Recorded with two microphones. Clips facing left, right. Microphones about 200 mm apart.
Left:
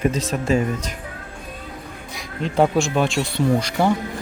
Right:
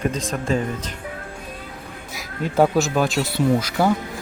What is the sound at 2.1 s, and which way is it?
Speech, 5° right (ahead or behind).